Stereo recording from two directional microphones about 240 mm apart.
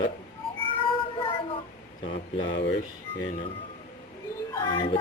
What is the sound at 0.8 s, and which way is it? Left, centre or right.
Child singing, left.